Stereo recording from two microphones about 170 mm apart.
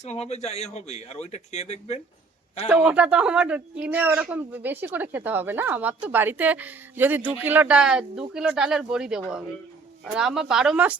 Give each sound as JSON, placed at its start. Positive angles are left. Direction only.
{"t": 0.0, "sound": "speech", "side_deg": 40}
{"t": 2.6, "sound": "speech", "side_deg": -10}